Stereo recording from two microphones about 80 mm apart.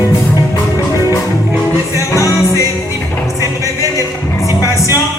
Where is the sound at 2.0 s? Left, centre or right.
Left.